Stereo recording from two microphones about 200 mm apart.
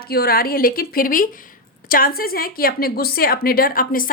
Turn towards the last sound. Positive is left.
turn(degrees=45)  # may be behind; listen again after turning